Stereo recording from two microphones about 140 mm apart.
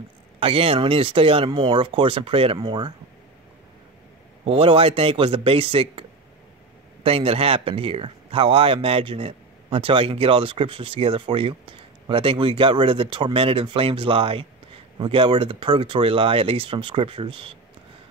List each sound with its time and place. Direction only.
0.4 s speech: 40° right (ahead or behind)
4.5 s speech: 40° right (ahead or behind)